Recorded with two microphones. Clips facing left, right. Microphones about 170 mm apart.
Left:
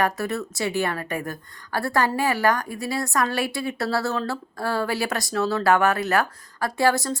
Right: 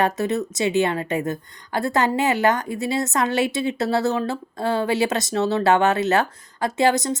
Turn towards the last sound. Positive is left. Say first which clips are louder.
# right 2 dB
turn(degrees=-20)  # may be behind; listen again after turning